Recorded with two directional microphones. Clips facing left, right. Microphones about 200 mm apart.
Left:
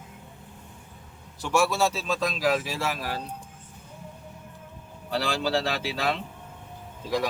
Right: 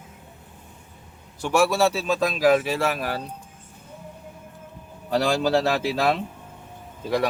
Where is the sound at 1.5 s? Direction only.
60° right (ahead or behind).